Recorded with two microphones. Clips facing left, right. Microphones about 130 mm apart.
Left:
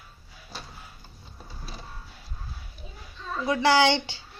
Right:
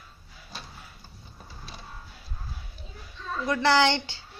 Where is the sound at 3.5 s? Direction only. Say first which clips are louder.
Left 1 dB; 10° left (ahead or behind).